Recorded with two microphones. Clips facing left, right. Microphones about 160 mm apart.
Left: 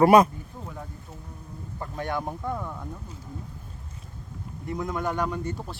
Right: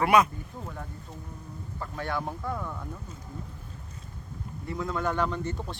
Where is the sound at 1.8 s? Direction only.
20° left (ahead or behind).